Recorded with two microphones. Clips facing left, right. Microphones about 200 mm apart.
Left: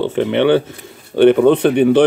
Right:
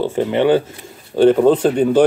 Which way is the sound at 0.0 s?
70° left (ahead or behind).